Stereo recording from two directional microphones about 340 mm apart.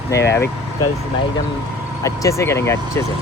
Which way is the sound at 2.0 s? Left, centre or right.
Centre.